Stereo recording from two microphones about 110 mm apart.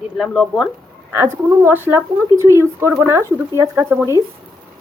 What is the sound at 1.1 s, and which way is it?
A woman's voice, 20° right (ahead or behind).